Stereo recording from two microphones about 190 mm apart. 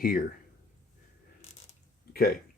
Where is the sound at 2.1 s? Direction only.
50° left (ahead or behind).